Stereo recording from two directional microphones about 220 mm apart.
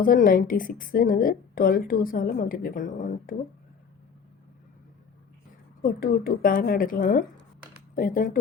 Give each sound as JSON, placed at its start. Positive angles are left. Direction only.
{"t": 0.0, "sound": "a woman's voice", "side_deg": 40}
{"t": 6.0, "sound": "a woman's voice", "side_deg": 40}